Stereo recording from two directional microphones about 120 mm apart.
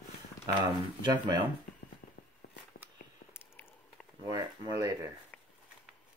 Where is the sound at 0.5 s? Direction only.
35° right (ahead or behind).